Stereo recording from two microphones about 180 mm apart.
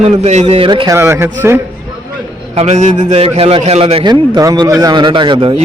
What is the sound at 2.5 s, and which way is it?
A man's voice, 40° right (ahead or behind).